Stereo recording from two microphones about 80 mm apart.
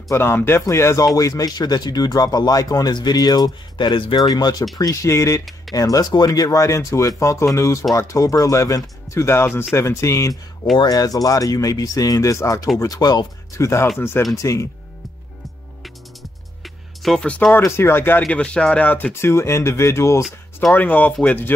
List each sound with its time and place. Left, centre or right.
0.1 s speech: left
4.3 s speech: left
4.7 s speech: left
10.9 s speech: left
13.6 s speech: left
15.8 s music: centre
17.3 s speech: centre
17.6 s speech: left
18.3 s speech: centre
19.2 s speech: left
20.7 s speech: left